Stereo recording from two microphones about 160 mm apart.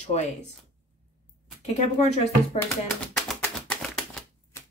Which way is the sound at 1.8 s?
45° left (ahead or behind).